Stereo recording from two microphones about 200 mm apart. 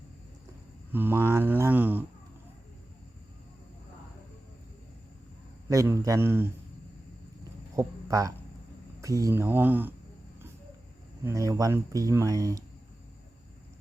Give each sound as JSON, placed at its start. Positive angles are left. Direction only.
{"t": 0.9, "sound": "speech", "side_deg": -10}
{"t": 5.6, "sound": "speech", "side_deg": -15}
{"t": 7.8, "sound": "speech", "side_deg": -15}
{"t": 11.2, "sound": "speech", "side_deg": -15}